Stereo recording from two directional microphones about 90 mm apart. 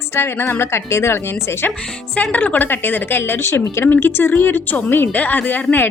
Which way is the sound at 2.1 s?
15° left (ahead or behind).